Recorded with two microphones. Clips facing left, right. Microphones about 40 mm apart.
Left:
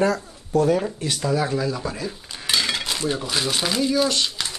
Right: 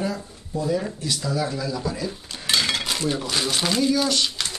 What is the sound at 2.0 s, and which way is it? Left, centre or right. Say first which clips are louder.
Dishes: even; centre.